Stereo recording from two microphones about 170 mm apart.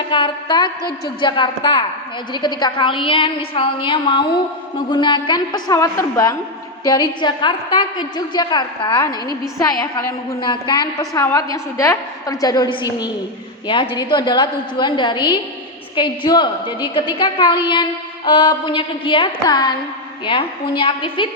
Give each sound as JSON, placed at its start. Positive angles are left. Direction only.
{"t": 0.1, "sound": "a woman's voice", "side_deg": 30}